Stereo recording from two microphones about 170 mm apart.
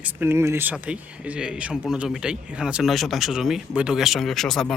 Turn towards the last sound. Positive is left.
turn(degrees=0)  # may be behind; listen again after turning